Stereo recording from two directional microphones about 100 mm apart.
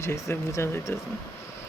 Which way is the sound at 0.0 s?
25° left (ahead or behind).